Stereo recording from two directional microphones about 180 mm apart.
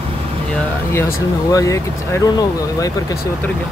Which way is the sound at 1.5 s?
15° left (ahead or behind).